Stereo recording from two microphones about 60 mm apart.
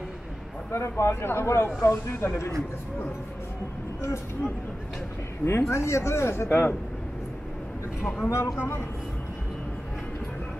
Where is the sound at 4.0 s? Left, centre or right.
Left.